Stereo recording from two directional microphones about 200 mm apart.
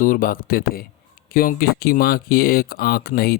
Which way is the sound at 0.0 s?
45° left (ahead or behind).